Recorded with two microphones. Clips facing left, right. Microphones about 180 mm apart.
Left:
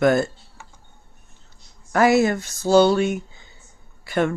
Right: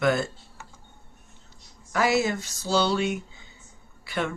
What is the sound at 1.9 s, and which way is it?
Speech, 50° left (ahead or behind).